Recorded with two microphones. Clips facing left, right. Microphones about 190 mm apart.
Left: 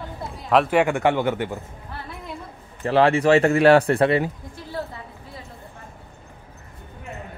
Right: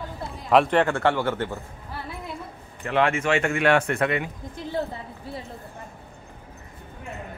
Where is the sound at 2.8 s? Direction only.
35° left (ahead or behind).